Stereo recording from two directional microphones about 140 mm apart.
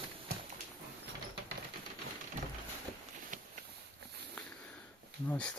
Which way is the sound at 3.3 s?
65° right (ahead or behind).